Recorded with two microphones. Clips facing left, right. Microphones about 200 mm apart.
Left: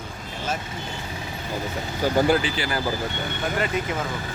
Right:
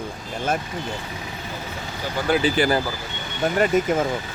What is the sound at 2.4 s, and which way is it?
Speech, 45° right (ahead or behind).